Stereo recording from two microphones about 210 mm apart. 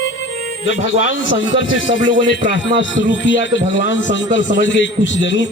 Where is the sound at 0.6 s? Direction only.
60° left (ahead or behind).